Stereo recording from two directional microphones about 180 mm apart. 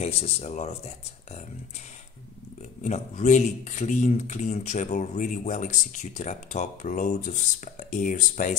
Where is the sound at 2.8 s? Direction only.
40° left (ahead or behind).